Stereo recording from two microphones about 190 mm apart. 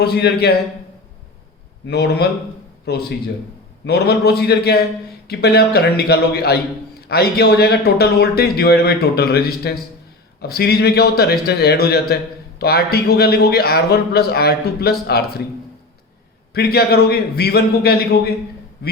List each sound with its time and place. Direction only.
0.0 s a man's voice: 60° left (ahead or behind)
1.9 s a man's voice: 60° left (ahead or behind)
16.5 s a man's voice: 55° left (ahead or behind)